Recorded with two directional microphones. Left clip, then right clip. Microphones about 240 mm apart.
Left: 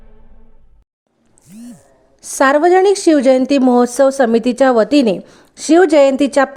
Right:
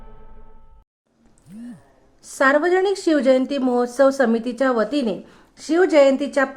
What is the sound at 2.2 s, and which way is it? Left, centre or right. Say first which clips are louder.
A woman's voice: left 6 dB; left.